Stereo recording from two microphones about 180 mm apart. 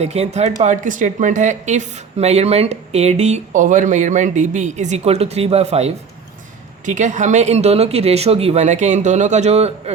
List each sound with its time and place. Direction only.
0.0 s a woman's voice: 35° right (ahead or behind)